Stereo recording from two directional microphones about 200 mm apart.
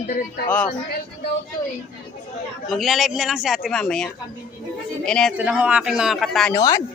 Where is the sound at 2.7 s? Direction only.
Centre (ahead or behind).